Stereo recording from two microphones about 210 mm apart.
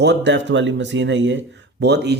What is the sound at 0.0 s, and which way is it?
Speech, 55° right (ahead or behind).